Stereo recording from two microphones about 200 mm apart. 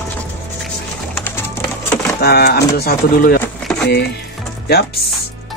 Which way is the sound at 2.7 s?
50° left (ahead or behind).